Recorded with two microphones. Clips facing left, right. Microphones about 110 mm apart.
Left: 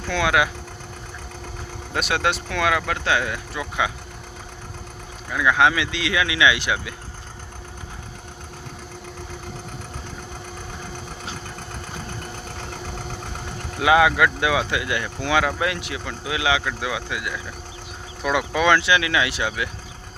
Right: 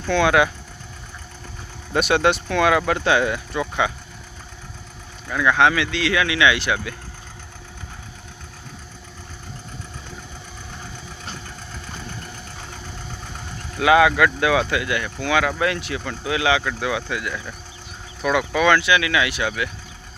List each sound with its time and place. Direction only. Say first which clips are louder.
0.1 s speech: right 4 dB; 5° left (ahead or behind)
1.9 s speech: right 5 dB; centre (ahead or behind)
5.3 s speech: right 1 dB; 10° left (ahead or behind)
13.7 s speech: right 1 dB; 20° left (ahead or behind)